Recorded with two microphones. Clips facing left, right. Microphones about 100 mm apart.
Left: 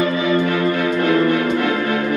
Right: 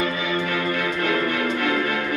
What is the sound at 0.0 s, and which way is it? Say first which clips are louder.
Music: left 7 dB; 25° left (ahead or behind).